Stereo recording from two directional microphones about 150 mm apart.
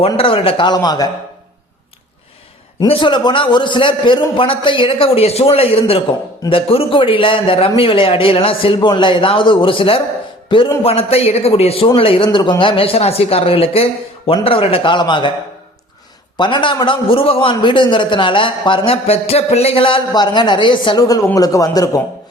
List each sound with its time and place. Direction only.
0.2 s a man's voice: 40° left (ahead or behind)
2.8 s a man's voice: 35° left (ahead or behind)
10.8 s a man's voice: 40° left (ahead or behind)
16.4 s a man's voice: 30° left (ahead or behind)